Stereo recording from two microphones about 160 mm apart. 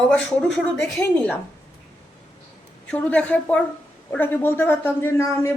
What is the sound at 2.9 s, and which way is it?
Speech, 10° left (ahead or behind).